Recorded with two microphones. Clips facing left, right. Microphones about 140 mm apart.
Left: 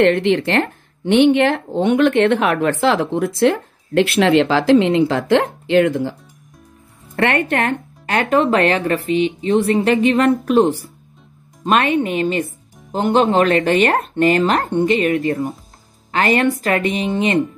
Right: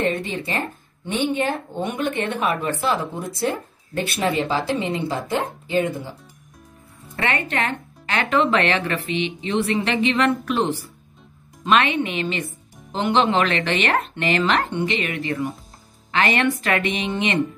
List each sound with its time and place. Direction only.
0.0 s speech: 85° left
2.8 s speech: 90° left
7.2 s speech: 55° left (ahead or behind)